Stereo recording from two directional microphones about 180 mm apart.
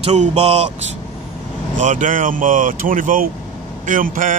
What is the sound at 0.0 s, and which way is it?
Speech, 40° right (ahead or behind).